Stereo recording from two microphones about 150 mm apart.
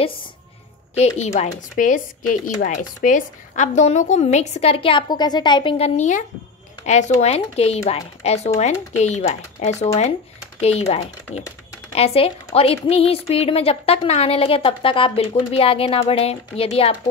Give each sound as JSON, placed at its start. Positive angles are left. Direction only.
{"t": 0.9, "sound": "a woman's voice", "side_deg": 50}